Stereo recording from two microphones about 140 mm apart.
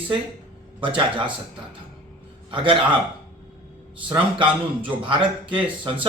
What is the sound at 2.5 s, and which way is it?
Speech, 35° right (ahead or behind).